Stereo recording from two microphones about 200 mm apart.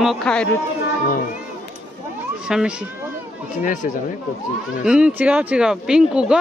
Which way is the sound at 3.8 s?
40° left (ahead or behind).